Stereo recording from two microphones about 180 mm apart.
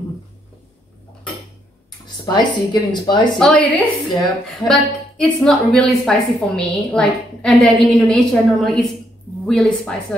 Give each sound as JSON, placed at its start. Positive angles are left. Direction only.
{"t": 2.2, "sound": "a woman's voice", "side_deg": 25}
{"t": 3.3, "sound": "a woman's voice", "side_deg": 5}